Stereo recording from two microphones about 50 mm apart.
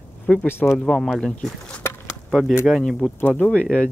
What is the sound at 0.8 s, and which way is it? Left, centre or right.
Speech, centre.